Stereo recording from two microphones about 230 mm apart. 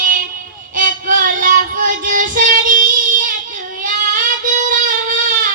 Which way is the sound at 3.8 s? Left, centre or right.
Right.